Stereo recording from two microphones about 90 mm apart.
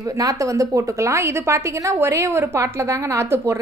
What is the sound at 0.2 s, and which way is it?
A woman's voice, 35° right (ahead or behind).